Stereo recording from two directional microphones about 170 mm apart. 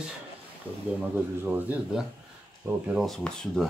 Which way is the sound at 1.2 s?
10° right (ahead or behind).